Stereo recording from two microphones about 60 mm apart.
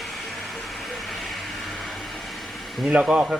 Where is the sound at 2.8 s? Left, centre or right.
Centre.